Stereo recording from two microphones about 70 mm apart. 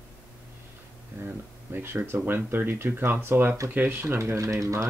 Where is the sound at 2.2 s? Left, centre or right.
Right.